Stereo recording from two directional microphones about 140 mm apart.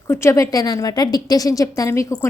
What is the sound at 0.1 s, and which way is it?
A woman's voice, 20° left (ahead or behind).